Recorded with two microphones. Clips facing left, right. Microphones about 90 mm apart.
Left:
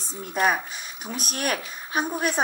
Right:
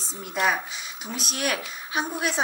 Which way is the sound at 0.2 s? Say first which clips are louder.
Left 2 dB; 45° left (ahead or behind).